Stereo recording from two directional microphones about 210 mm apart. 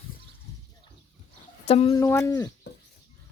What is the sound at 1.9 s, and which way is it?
Speech, 15° left (ahead or behind).